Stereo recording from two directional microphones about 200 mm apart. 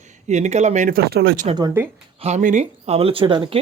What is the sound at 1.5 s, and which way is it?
Speech, 15° right (ahead or behind).